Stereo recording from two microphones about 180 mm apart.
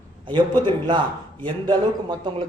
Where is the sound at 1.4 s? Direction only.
25° right (ahead or behind).